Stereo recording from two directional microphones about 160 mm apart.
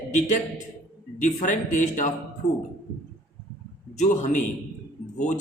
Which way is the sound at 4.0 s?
50° left (ahead or behind).